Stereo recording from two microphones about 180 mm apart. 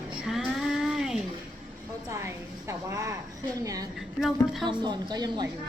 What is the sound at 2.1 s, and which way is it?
A woman's voice, 15° right (ahead or behind).